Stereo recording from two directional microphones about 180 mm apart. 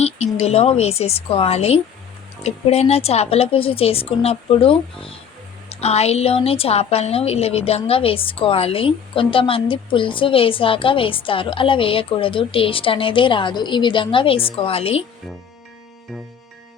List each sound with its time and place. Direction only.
0.3 s a woman's voice: 35° left (ahead or behind)